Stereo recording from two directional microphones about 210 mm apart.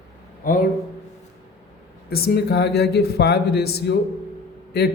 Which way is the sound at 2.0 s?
45° left (ahead or behind).